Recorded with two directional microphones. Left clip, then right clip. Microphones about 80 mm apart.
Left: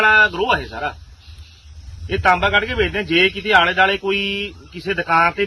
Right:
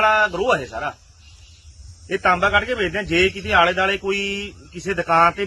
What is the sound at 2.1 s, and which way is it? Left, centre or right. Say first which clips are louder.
Speech: left 2 dB; right.